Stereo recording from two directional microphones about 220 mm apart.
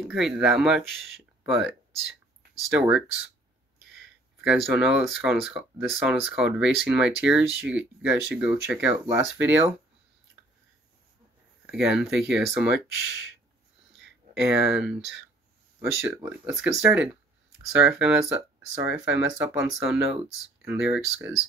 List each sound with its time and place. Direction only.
0.1 s speech: 5° right (ahead or behind)
4.4 s speech: 5° right (ahead or behind)
11.6 s speech: 5° right (ahead or behind)
14.5 s speech: 5° right (ahead or behind)